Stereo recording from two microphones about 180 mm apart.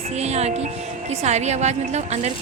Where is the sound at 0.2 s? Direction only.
35° right (ahead or behind).